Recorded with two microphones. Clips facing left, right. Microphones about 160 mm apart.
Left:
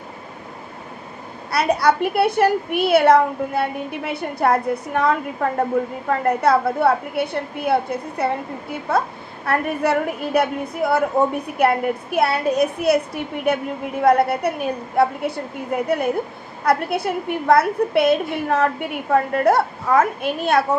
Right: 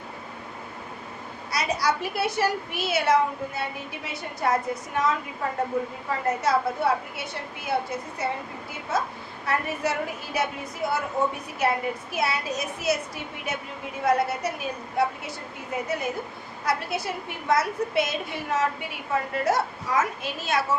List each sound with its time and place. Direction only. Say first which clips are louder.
1.5 s a child's voice: left 8 dB; 60° left (ahead or behind)